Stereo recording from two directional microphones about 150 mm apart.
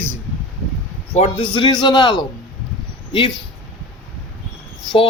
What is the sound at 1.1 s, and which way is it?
Speech, 45° left (ahead or behind).